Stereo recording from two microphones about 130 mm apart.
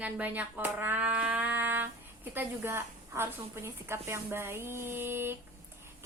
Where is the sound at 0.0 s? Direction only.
10° right (ahead or behind).